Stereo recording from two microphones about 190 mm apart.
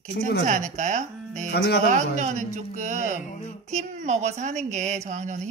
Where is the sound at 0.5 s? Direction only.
40° right (ahead or behind).